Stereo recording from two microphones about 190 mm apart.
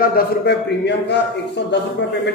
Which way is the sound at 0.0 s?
55° left (ahead or behind).